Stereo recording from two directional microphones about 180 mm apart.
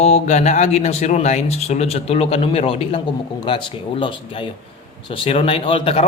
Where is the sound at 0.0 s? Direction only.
40° left (ahead or behind).